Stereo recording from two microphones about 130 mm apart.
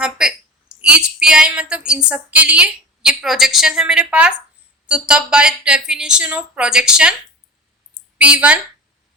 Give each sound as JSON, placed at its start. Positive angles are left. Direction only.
{"t": 0.0, "sound": "a sound", "side_deg": -5}
{"t": 2.0, "sound": "a woman's voice", "side_deg": -10}
{"t": 8.2, "sound": "speech", "side_deg": -10}